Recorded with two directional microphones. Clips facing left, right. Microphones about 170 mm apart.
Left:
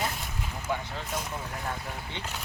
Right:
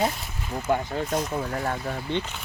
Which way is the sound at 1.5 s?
55° right (ahead or behind).